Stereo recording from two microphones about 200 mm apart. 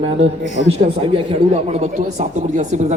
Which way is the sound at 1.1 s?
35° right (ahead or behind).